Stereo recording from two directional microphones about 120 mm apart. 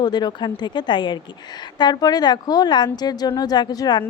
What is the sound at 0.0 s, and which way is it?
A woman's voice, 35° left (ahead or behind).